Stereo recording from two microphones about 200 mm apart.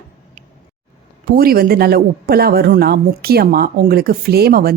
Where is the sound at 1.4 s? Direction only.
45° right (ahead or behind).